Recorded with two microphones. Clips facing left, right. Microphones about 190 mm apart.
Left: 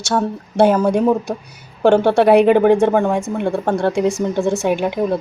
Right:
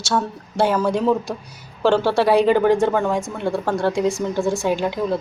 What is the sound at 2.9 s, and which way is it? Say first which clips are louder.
A woman's voice: left 4 dB; 25° left (ahead or behind).